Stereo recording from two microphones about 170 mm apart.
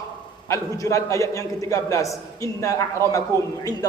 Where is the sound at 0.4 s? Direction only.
15° left (ahead or behind).